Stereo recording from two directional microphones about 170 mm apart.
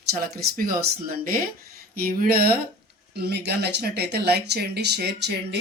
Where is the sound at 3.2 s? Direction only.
75° right (ahead or behind).